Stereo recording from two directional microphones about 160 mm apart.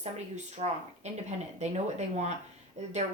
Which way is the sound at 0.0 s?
45° right (ahead or behind).